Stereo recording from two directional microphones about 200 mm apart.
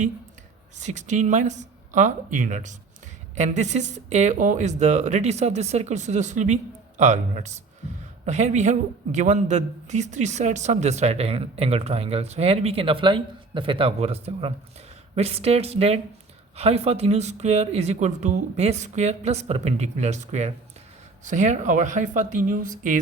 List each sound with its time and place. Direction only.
0.8 s a man's voice: 35° right (ahead or behind)